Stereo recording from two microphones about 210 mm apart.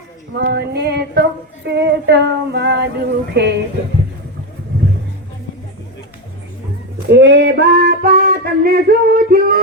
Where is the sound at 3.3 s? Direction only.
55° right (ahead or behind).